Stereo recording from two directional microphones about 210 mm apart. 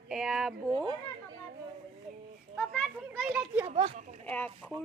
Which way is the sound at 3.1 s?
10° right (ahead or behind).